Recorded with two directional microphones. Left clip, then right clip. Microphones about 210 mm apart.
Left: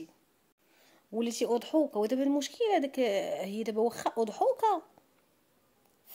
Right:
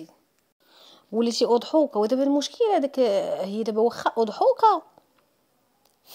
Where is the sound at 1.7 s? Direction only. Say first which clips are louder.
Right 7 dB; 20° right (ahead or behind).